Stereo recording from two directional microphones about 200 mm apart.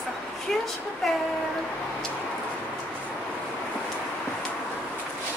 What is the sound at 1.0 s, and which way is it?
Train, centre (ahead or behind).